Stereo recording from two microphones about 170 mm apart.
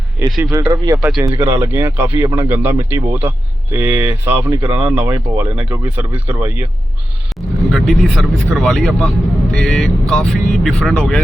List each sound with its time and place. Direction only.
0.2 s speech: 10° right (ahead or behind)
7.3 s speech: centre (ahead or behind)